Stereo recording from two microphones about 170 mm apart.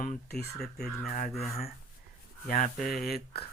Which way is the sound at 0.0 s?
60° left (ahead or behind).